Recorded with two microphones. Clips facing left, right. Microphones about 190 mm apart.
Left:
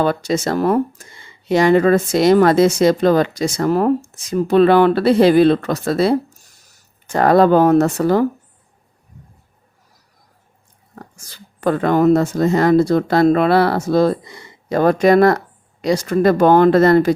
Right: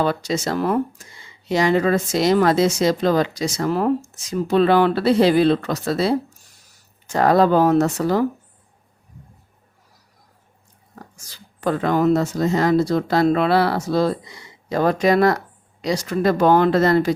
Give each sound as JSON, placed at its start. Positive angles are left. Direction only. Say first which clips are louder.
{"t": 0.0, "sound": "speech", "louder": "left 3 dB", "side_deg": 50}
{"t": 1.5, "sound": "speech", "louder": "left 5 dB", "side_deg": 55}
{"t": 10.9, "sound": "speech", "louder": "left 3 dB", "side_deg": 55}